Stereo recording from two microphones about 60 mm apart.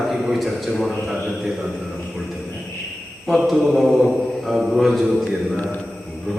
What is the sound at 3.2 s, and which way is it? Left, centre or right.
Mantra, centre.